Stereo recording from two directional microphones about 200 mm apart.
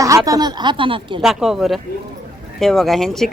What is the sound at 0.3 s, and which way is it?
Speech, 20° right (ahead or behind).